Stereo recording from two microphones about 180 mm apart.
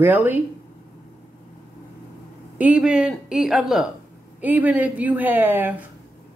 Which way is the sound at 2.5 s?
5° right (ahead or behind).